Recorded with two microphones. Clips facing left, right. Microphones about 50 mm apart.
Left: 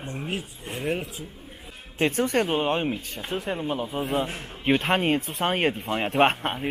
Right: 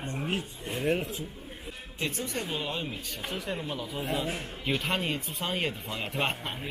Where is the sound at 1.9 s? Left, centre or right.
Left.